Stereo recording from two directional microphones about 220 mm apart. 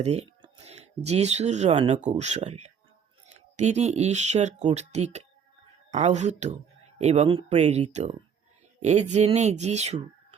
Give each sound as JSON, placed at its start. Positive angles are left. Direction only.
{"t": 0.0, "sound": "speech", "side_deg": -30}